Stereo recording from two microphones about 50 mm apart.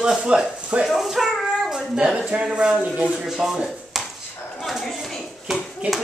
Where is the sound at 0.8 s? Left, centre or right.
Centre.